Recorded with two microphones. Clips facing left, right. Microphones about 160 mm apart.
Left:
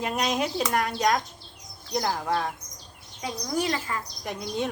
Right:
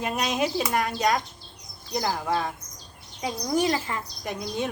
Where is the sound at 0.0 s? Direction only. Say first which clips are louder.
Right 1 dB; centre (ahead or behind).